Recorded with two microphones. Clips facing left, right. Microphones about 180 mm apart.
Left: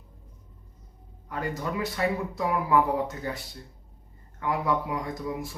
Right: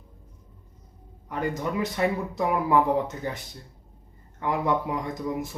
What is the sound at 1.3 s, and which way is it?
Speech, 20° right (ahead or behind).